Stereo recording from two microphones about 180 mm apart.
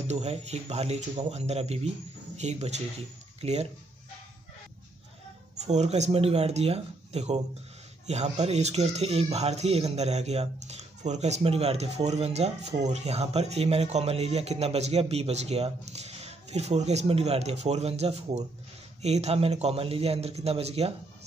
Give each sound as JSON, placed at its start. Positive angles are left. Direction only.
{"t": 0.0, "sound": "speech", "side_deg": -35}
{"t": 5.6, "sound": "speech", "side_deg": -40}